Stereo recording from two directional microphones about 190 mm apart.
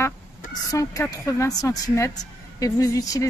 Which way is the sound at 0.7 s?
15° left (ahead or behind).